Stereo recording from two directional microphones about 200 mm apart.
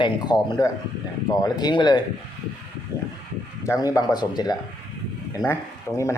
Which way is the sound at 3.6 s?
15° left (ahead or behind).